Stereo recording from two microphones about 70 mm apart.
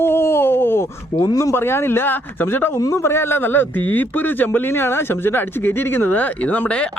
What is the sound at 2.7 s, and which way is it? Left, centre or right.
A man's voice, left.